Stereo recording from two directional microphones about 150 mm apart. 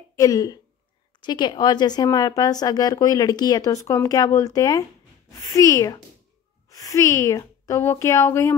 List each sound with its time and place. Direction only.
0.1 s speech: 20° left (ahead or behind)